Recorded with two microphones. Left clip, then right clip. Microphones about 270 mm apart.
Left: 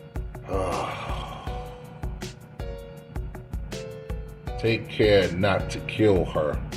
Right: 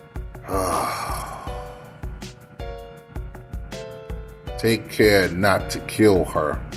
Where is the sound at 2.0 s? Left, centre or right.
Centre.